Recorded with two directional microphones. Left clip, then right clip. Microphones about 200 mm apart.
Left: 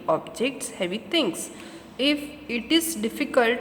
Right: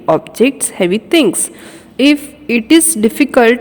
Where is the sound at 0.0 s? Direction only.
45° right (ahead or behind).